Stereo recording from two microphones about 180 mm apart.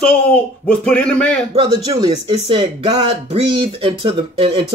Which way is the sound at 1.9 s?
25° right (ahead or behind).